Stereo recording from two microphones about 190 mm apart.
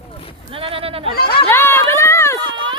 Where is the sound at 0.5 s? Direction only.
30° right (ahead or behind).